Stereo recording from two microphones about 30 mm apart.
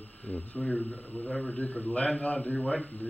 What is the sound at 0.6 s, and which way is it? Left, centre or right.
Speech, centre.